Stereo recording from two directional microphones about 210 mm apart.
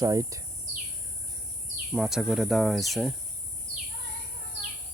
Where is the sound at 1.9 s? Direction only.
5° right (ahead or behind).